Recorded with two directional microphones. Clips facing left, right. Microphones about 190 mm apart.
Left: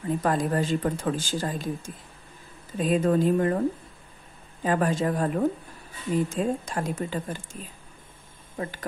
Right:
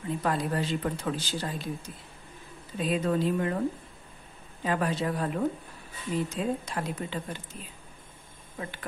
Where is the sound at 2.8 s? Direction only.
45° left (ahead or behind).